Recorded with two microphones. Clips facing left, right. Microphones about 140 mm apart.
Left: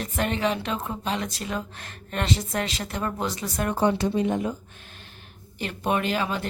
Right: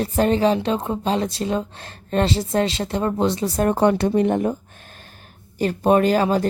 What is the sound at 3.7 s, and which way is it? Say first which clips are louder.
Speech: right 4 dB; 60° right (ahead or behind).